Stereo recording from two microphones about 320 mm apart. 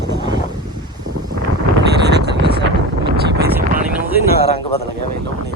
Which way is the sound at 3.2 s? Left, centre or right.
Right.